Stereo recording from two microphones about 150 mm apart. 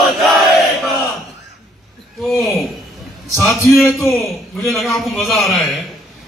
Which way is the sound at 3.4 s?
20° left (ahead or behind).